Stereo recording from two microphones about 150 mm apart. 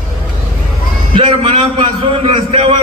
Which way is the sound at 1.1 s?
35° right (ahead or behind).